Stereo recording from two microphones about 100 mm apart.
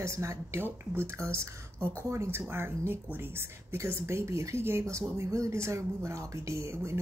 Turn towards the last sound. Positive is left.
turn(degrees=-25)  # may be behind; listen again after turning